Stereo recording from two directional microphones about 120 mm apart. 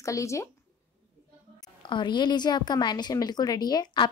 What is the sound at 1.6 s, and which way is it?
A woman's voice, 40° left (ahead or behind).